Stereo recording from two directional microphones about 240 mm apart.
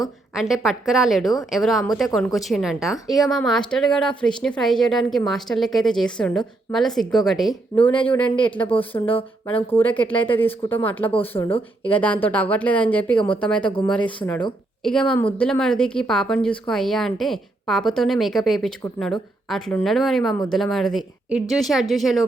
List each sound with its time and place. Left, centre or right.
0.3 s speech: centre
11.4 s speech: left
11.9 s speech: centre
13.7 s speech: centre
14.8 s speech: centre